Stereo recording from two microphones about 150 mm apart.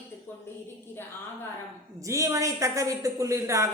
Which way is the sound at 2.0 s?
20° right (ahead or behind).